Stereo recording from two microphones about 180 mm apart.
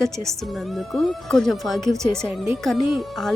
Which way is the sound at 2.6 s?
Centre (ahead or behind).